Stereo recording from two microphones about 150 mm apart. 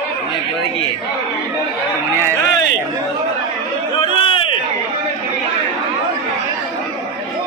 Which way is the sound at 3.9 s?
35° left (ahead or behind).